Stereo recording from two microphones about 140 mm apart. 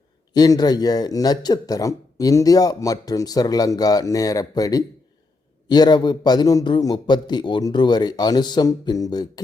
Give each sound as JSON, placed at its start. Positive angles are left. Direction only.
{"t": 0.3, "sound": "speech", "side_deg": 25}